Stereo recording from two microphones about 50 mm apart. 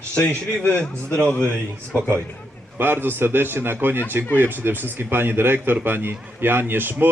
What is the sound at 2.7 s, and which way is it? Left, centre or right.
Speech, right.